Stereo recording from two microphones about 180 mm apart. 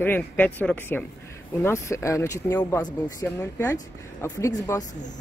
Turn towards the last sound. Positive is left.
turn(degrees=15)  # may be behind; listen again after turning